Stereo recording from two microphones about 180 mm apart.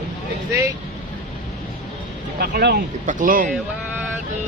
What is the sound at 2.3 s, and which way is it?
Speech, 65° right (ahead or behind).